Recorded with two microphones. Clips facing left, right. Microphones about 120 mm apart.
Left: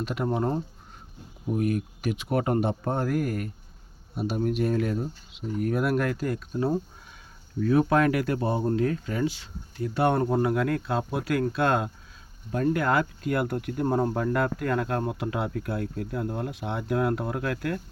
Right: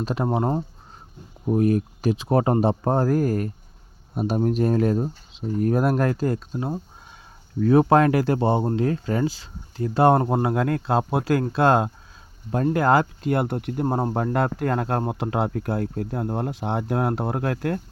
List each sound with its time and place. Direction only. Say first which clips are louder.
0.0 s speech: right 3 dB; 35° right (ahead or behind)